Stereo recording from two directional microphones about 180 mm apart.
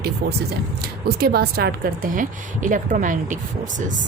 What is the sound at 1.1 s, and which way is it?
A woman's voice, 60° right (ahead or behind).